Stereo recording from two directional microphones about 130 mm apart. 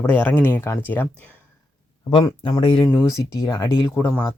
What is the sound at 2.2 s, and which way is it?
Speech, 30° left (ahead or behind).